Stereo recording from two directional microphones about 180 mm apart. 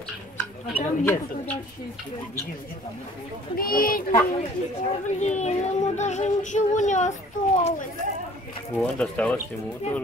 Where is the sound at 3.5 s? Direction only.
55° left (ahead or behind).